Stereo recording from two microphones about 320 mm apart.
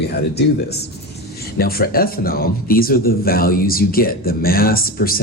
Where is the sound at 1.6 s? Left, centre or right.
Left.